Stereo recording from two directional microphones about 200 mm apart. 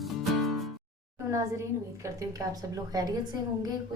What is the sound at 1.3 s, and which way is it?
A woman's voice, 15° right (ahead or behind).